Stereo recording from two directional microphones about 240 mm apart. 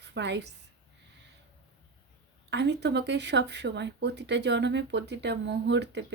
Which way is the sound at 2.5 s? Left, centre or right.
Right.